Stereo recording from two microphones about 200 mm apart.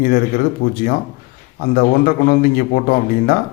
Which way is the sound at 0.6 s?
45° left (ahead or behind).